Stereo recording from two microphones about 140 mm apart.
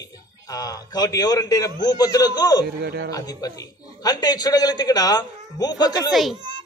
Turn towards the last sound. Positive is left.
turn(degrees=30)  # may be behind; listen again after turning